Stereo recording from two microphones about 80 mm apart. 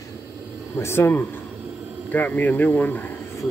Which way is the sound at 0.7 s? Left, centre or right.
Left.